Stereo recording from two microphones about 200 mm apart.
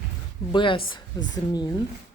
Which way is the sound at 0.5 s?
25° left (ahead or behind).